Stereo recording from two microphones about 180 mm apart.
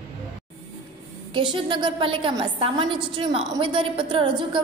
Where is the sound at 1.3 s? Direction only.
25° right (ahead or behind).